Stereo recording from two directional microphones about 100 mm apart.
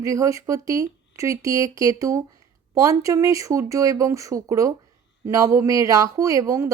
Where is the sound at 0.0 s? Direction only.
35° right (ahead or behind).